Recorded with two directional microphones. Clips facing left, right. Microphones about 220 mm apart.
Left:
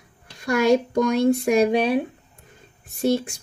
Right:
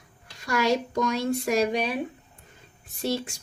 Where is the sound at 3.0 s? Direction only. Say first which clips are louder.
Left 7 dB; 50° left (ahead or behind).